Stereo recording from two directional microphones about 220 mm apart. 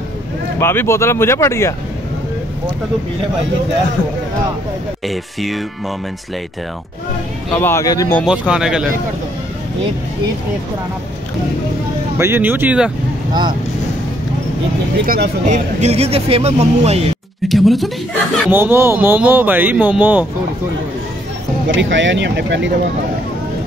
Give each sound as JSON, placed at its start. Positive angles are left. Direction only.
{"t": 0.6, "sound": "speech", "side_deg": 10}
{"t": 5.0, "sound": "speech", "side_deg": 0}
{"t": 7.5, "sound": "speech", "side_deg": 10}
{"t": 8.3, "sound": "speech", "side_deg": -5}
{"t": 12.2, "sound": "speech", "side_deg": -10}
{"t": 13.3, "sound": "speech", "side_deg": -20}
{"t": 15.0, "sound": "speech", "side_deg": -45}
{"t": 17.5, "sound": "speech", "side_deg": 0}
{"t": 18.5, "sound": "speech", "side_deg": -10}
{"t": 21.7, "sound": "speech", "side_deg": -55}